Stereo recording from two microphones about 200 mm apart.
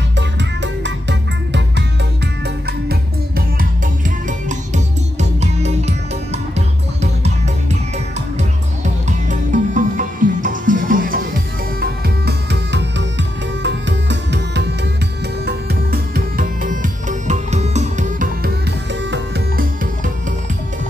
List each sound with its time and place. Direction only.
0.4 s music: 60° right (ahead or behind)
2.4 s music: 50° right (ahead or behind); by 7.3 s 35° right (ahead or behind)
9.3 s music: 40° right (ahead or behind)
19.0 s music: 60° right (ahead or behind)